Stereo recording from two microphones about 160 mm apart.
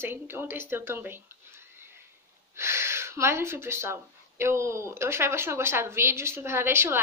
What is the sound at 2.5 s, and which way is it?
Speech, 15° right (ahead or behind).